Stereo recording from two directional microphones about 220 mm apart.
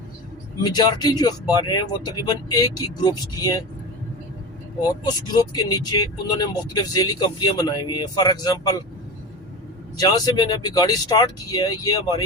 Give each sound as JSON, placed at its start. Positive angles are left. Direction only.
{"t": 0.6, "sound": "speech", "side_deg": 20}
{"t": 5.0, "sound": "speech", "side_deg": 20}
{"t": 10.0, "sound": "speech", "side_deg": 20}